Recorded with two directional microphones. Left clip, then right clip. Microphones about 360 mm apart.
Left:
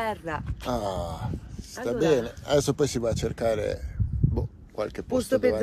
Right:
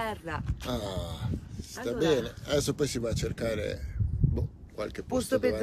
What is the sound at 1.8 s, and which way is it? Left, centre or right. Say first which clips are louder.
A man's voice: left 4 dB; centre.